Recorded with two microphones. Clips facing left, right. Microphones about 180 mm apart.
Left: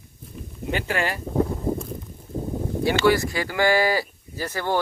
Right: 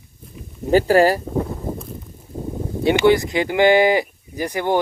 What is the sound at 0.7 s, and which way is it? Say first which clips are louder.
Speech: right 12 dB; 35° right (ahead or behind).